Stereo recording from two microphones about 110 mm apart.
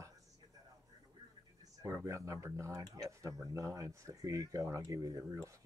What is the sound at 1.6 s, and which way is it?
Speech, 30° right (ahead or behind).